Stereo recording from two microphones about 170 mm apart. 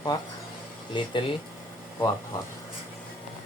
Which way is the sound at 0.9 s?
30° left (ahead or behind).